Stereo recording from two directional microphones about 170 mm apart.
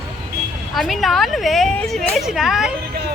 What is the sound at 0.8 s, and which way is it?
Speech, centre (ahead or behind).